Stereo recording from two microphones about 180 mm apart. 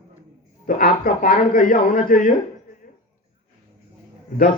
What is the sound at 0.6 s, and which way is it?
A man's voice, 50° left (ahead or behind).